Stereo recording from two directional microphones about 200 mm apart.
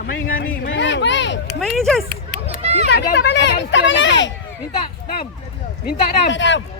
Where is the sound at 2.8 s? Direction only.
55° left (ahead or behind).